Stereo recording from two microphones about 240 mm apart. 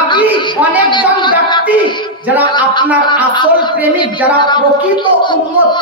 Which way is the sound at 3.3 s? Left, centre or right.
Centre.